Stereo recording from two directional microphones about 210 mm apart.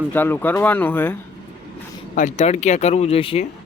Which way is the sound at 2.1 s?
35° left (ahead or behind).